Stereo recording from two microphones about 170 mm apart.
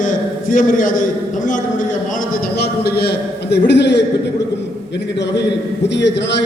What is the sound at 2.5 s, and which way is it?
A man's voice, 70° left (ahead or behind).